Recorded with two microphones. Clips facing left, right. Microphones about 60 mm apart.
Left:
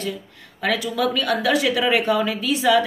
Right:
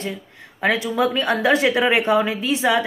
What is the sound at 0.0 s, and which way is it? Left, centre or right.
Speech, right.